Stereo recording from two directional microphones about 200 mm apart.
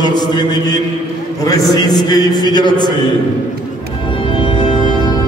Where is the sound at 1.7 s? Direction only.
20° left (ahead or behind).